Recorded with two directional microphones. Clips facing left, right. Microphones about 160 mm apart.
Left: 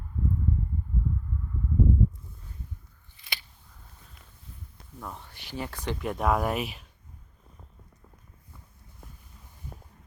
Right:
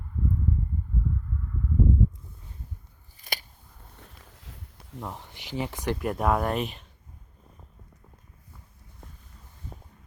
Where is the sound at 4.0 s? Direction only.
90° right.